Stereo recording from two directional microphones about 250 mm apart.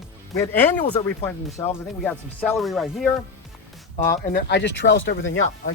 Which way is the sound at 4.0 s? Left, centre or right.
Left.